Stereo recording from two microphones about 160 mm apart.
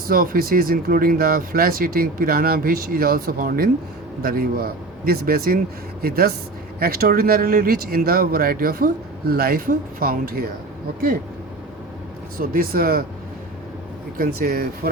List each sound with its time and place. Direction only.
0.1 s speech: 65° right (ahead or behind)
12.4 s speech: 65° right (ahead or behind)
14.2 s speech: 70° right (ahead or behind)